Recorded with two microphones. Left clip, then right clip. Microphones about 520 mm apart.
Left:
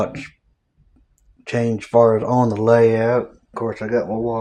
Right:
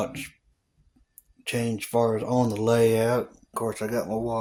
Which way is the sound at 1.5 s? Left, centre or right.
Right.